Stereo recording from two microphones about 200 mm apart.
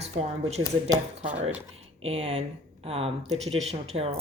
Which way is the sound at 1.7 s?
30° right (ahead or behind).